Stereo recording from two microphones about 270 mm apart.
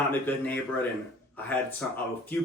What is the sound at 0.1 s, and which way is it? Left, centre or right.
Speech, centre.